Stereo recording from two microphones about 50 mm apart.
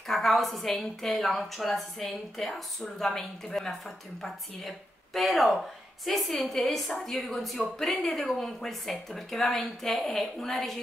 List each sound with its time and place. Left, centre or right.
0.0 s speech: centre
3.1 s speech: centre
4.2 s speech: centre